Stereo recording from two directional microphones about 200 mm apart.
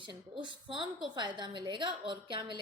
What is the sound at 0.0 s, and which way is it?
A woman's voice, 25° right (ahead or behind).